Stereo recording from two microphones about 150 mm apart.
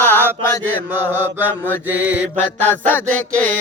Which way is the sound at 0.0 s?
15° left (ahead or behind).